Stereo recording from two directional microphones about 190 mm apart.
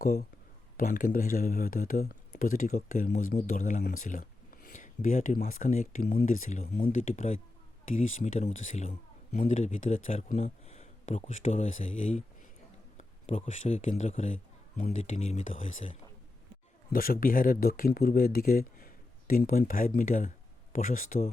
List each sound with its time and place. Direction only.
0.0 s speech: 50° left (ahead or behind)